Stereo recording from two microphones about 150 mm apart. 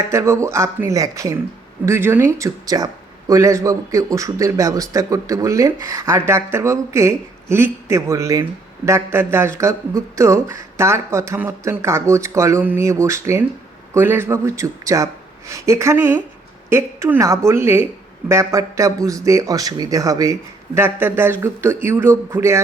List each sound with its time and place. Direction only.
0.1 s speech: 20° right (ahead or behind)